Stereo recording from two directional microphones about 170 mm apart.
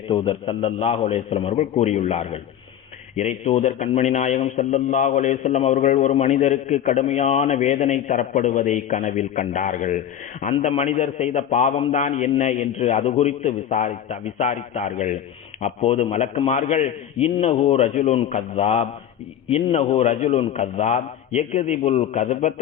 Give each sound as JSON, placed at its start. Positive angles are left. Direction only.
{"t": 0.1, "sound": "a man's voice", "side_deg": 30}